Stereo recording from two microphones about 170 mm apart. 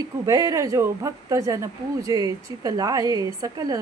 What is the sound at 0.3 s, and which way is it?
A woman's voice, 20° right (ahead or behind).